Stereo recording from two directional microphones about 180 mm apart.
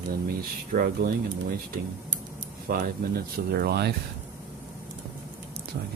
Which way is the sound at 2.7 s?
50° right (ahead or behind).